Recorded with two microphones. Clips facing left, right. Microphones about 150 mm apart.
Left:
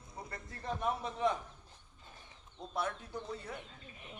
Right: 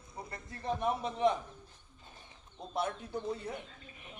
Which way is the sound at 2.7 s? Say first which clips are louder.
Right 3 dB; 20° right (ahead or behind).